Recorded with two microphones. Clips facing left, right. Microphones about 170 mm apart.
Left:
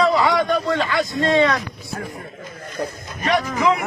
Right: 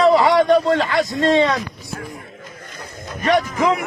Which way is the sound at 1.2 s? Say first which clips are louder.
Right 1 dB; 30° right (ahead or behind).